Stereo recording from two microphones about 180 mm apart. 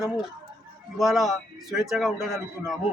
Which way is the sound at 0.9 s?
Centre (ahead or behind).